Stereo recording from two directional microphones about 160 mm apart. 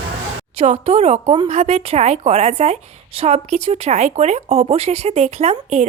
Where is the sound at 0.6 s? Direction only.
45° right (ahead or behind).